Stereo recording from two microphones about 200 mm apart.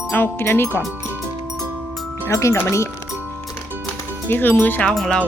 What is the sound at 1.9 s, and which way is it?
Music, centre (ahead or behind).